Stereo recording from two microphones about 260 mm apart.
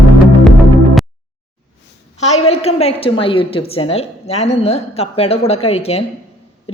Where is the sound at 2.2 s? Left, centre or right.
Left.